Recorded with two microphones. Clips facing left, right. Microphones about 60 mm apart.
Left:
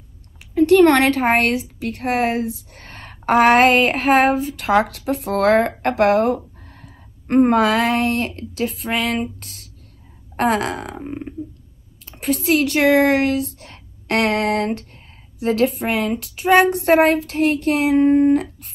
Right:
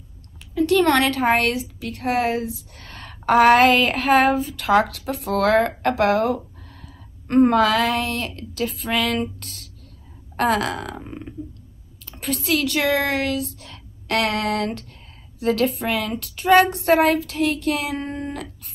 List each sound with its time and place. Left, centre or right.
0.6 s a woman's voice: left
10.3 s child singing: left
12.0 s speech: left
15.3 s child singing: left